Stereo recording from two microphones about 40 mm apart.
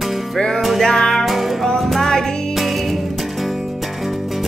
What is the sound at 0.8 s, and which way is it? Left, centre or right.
Music, centre.